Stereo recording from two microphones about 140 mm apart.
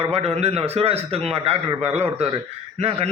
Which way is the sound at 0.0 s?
45° right (ahead or behind).